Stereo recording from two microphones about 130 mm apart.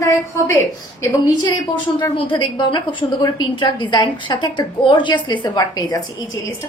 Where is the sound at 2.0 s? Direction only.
35° left (ahead or behind).